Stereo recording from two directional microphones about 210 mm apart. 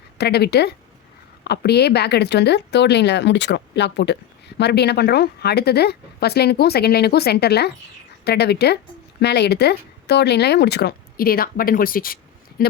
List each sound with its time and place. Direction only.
0.2 s speech: 50° left (ahead or behind)